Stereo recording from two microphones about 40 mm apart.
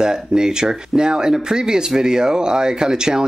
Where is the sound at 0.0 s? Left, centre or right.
Centre.